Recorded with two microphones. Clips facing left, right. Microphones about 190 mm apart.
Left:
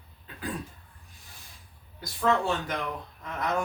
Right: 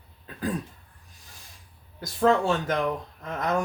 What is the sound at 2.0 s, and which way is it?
Speech, 45° right (ahead or behind).